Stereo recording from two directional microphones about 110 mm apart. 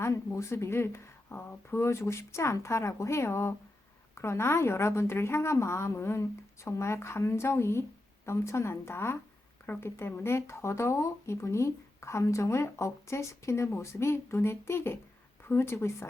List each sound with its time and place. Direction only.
0.0 s speech: 25° left (ahead or behind)